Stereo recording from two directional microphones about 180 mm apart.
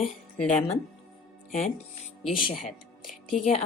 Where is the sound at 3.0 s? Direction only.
Centre (ahead or behind).